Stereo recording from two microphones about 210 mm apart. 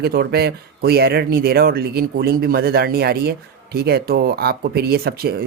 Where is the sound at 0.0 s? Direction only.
50° right (ahead or behind).